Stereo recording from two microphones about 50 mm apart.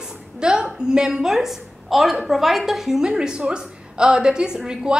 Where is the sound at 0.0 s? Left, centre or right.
Centre.